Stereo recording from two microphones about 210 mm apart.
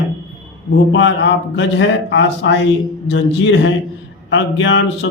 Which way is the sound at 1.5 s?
60° left (ahead or behind).